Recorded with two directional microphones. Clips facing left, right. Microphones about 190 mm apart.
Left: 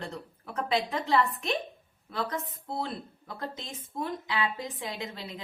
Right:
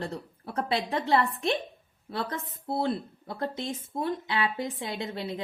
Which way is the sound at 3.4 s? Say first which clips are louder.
Right 7 dB; 30° right (ahead or behind).